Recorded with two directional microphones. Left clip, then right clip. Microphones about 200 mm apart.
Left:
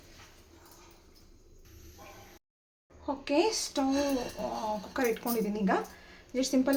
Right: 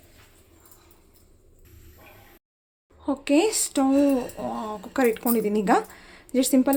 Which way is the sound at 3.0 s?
45° right (ahead or behind).